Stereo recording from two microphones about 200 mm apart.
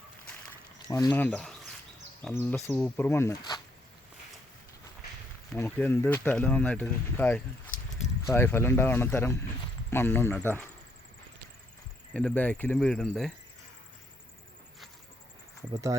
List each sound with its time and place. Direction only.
0.9 s speech: 15° left (ahead or behind)
2.4 s speech: 15° left (ahead or behind)
5.5 s speech: 10° left (ahead or behind)
12.1 s speech: 5° left (ahead or behind)
15.7 s speech: 15° right (ahead or behind)